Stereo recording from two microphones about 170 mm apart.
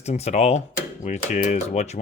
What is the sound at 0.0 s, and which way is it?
Speech, 40° left (ahead or behind).